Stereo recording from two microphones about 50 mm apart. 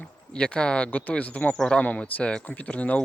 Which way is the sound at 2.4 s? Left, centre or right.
Left.